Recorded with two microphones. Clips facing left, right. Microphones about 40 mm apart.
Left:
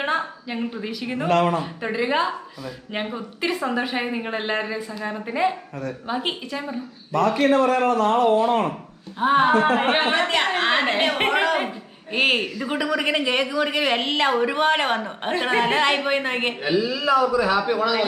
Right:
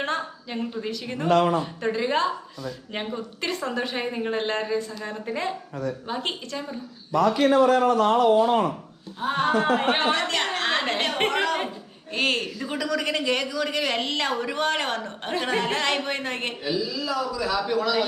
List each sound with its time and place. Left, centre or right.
0.0 s a woman's voice: centre
1.3 s speech: left
1.5 s speech: centre
7.1 s speech: left
7.3 s a man's voice: left
9.1 s speech: left
12.5 s speech: centre
12.7 s speech: centre
16.6 s a man's voice: left; by 18.0 s centre